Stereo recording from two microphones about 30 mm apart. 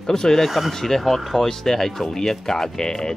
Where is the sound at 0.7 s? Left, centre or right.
Centre.